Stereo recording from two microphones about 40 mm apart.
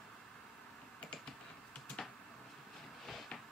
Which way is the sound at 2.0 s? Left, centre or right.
Left.